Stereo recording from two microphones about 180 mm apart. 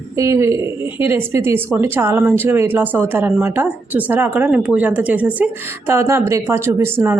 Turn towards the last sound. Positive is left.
turn(degrees=-15)  # may be behind; listen again after turning